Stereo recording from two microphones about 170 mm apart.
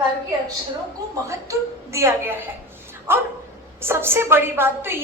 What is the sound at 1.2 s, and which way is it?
A woman's voice, 15° right (ahead or behind).